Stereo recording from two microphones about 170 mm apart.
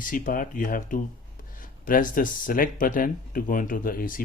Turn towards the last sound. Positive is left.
turn(degrees=55)  # may be behind; listen again after turning